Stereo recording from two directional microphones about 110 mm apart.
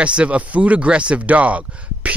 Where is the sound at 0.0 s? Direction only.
10° right (ahead or behind).